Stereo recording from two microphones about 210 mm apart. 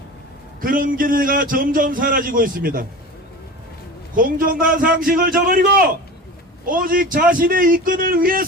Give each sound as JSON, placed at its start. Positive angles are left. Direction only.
{"t": 0.6, "sound": "a man's voice", "side_deg": -40}
{"t": 4.1, "sound": "a man's voice", "side_deg": -40}